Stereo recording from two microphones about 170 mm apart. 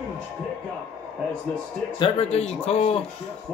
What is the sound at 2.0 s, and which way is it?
Speech, 35° left (ahead or behind).